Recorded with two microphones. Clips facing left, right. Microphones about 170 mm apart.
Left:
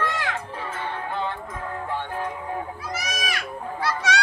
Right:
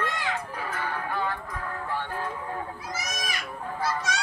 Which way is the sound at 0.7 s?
25° left (ahead or behind).